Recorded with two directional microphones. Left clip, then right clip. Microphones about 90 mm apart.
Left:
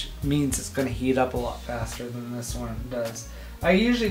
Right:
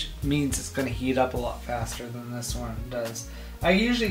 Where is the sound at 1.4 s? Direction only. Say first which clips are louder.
Even; 5° left (ahead or behind).